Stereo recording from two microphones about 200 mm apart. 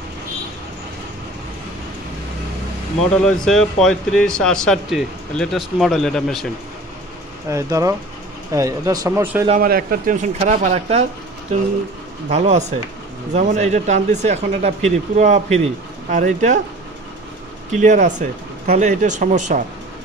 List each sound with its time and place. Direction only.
3.0 s speech: 5° left (ahead or behind)
7.4 s speech: 15° right (ahead or behind)
9.6 s speech: 50° right (ahead or behind); by 11.1 s 30° right (ahead or behind)
12.3 s speech: 35° right (ahead or behind)
17.7 s speech: 40° right (ahead or behind)